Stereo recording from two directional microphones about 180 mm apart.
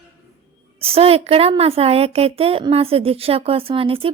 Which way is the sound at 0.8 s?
30° right (ahead or behind).